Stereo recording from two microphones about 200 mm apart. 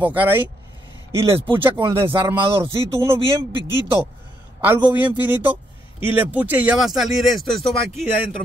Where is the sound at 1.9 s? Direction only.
15° right (ahead or behind).